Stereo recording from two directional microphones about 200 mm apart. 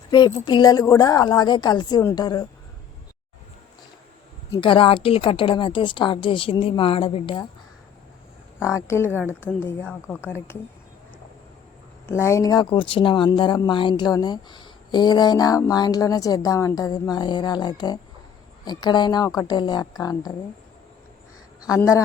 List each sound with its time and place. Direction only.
0.1 s speech: 20° left (ahead or behind)
4.5 s speech: 25° left (ahead or behind)
8.5 s speech: 15° left (ahead or behind)
12.0 s speech: 15° left (ahead or behind)
21.7 s speech: 15° left (ahead or behind)